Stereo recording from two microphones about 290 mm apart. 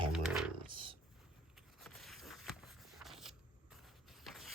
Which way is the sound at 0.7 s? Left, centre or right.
Centre.